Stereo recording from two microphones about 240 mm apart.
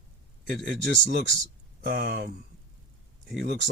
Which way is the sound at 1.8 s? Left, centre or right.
Right.